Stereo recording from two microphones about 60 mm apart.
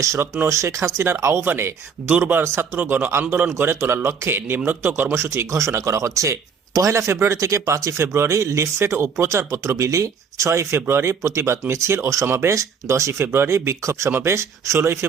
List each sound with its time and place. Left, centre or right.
0.0 s speech: right
2.0 s speech: centre
3.1 s a man's voice: right
5.1 s speech: right